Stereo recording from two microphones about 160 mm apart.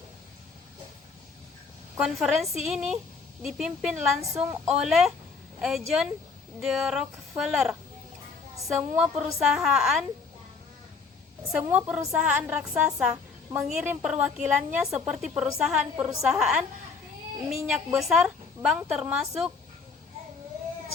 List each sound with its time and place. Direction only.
2.0 s a woman's voice: 5° right (ahead or behind)
11.5 s a woman's voice: 5° right (ahead or behind)
17.7 s a woman's voice: 5° right (ahead or behind)